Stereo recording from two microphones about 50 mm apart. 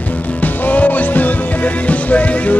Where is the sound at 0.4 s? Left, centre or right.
Left.